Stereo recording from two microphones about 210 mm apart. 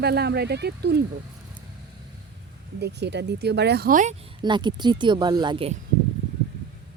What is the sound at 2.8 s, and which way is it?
Speech, 55° right (ahead or behind).